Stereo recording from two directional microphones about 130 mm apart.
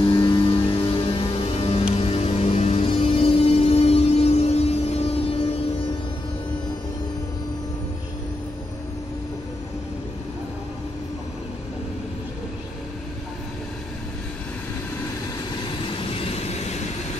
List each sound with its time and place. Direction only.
0.0 s music: 35° left (ahead or behind)
16.0 s train: 50° left (ahead or behind)